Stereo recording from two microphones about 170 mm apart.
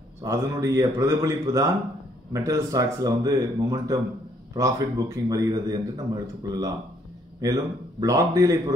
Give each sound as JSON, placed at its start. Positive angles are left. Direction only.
{"t": 0.2, "sound": "a man's voice", "side_deg": -15}